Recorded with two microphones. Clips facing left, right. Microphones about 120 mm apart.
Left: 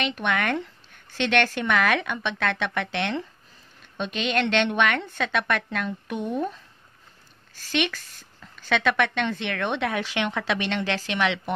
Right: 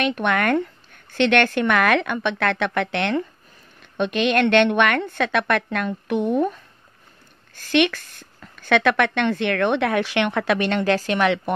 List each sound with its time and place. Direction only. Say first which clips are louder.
0.0 s a woman's voice: right 5 dB; 50° right (ahead or behind)